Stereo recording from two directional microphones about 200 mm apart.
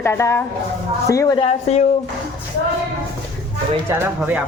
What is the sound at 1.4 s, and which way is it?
Speech, 30° left (ahead or behind).